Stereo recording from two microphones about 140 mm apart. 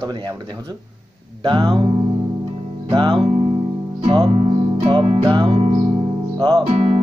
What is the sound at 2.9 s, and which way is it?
Music, 35° right (ahead or behind).